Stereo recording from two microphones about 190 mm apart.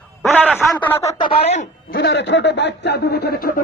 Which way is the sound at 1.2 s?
30° left (ahead or behind).